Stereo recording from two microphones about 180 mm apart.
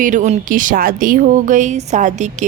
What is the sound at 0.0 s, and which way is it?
A woman's voice, 45° right (ahead or behind).